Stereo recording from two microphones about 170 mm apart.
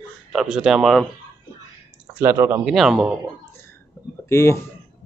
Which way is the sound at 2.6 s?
Centre (ahead or behind).